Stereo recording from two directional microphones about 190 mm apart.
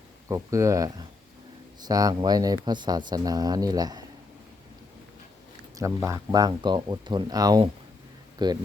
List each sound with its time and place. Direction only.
0.3 s speech: 15° right (ahead or behind)
5.7 s speech: 15° right (ahead or behind)